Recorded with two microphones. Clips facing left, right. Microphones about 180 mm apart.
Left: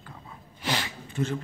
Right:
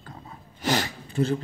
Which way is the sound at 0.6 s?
40° right (ahead or behind).